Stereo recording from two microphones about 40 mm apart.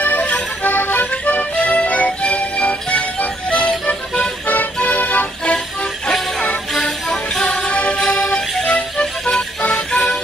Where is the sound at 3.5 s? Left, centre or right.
Centre.